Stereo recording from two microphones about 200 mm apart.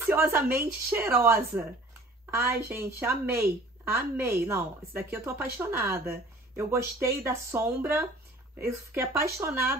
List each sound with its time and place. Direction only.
0.0 s a woman's voice: 10° right (ahead or behind)
3.0 s a woman's voice: 10° right (ahead or behind)